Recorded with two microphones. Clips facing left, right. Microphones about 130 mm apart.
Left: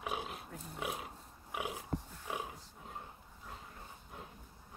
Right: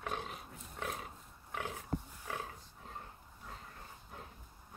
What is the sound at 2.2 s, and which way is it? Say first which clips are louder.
Wild animals: left 1 dB; 15° left (ahead or behind).